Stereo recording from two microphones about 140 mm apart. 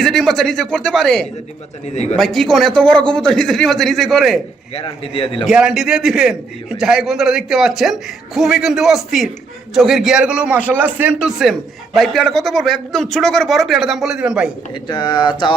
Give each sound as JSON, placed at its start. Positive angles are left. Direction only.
{"t": 0.0, "sound": "a man's voice", "side_deg": 0}
{"t": 4.7, "sound": "a man's voice", "side_deg": 40}
{"t": 5.5, "sound": "a man's voice", "side_deg": -5}
{"t": 14.8, "sound": "a man's voice", "side_deg": 30}